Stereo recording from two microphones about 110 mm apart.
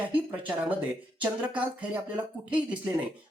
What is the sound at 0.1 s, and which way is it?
Speech, 15° right (ahead or behind).